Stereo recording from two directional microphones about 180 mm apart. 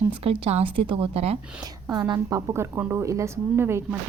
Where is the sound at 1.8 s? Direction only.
15° right (ahead or behind).